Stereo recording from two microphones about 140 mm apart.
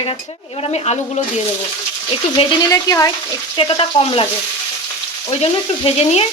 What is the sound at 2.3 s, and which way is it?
Frying, 35° left (ahead or behind).